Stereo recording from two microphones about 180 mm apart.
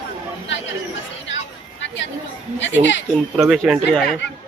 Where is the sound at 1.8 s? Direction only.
90° left.